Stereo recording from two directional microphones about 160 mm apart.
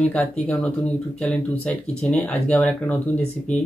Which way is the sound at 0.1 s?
10° left (ahead or behind).